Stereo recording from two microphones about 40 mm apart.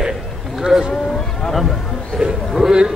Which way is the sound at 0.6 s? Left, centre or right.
Centre.